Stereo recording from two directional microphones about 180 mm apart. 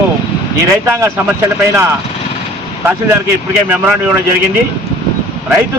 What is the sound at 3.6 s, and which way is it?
Speech, 10° right (ahead or behind).